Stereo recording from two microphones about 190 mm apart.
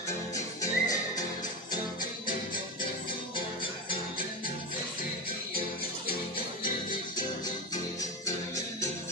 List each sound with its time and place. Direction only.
0.6 s music: 20° left (ahead or behind)